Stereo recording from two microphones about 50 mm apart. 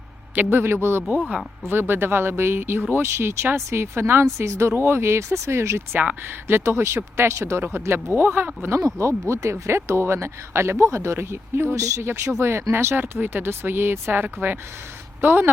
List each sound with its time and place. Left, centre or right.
0.5 s speech: right
6.2 s speech: right
8.8 s speech: right
11.7 s speech: right
12.4 s speech: right
13.0 s speech: right